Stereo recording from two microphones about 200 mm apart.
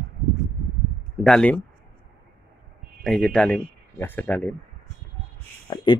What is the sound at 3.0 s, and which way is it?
Speech, 5° left (ahead or behind).